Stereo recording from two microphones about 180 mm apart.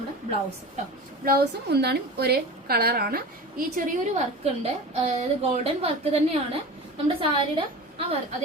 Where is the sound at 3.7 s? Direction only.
45° right (ahead or behind).